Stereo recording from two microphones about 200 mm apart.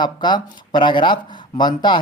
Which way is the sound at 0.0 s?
20° left (ahead or behind).